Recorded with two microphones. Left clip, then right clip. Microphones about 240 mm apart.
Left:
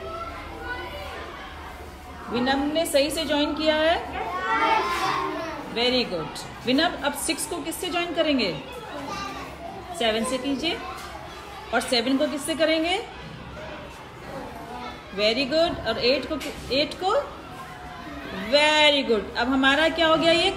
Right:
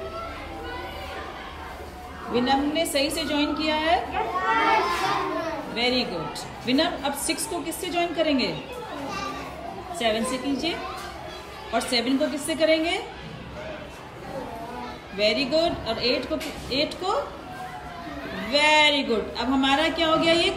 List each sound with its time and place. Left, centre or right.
2.3 s a woman's voice: centre
9.0 s children playing: centre
9.9 s a woman's voice: centre
15.1 s a woman's voice: centre
18.3 s a woman's voice: centre